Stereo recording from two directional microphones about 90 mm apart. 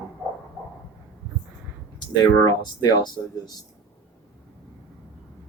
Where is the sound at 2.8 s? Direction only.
50° left (ahead or behind).